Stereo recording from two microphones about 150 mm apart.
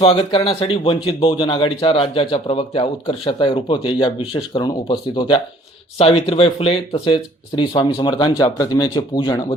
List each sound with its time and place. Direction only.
0.0 s a man's voice: 35° left (ahead or behind)